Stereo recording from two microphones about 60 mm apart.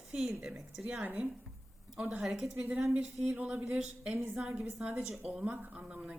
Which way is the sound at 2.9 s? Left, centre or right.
Right.